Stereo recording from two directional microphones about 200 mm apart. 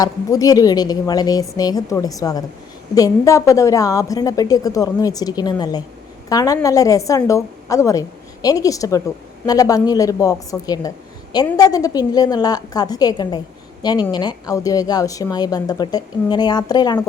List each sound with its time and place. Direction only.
0.0 s a woman's voice: 20° left (ahead or behind)